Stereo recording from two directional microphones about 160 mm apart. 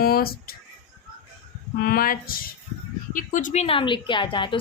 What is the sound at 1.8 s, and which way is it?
A woman's voice, 65° left (ahead or behind).